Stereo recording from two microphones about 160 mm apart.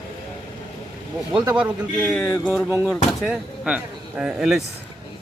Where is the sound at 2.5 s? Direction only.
10° right (ahead or behind).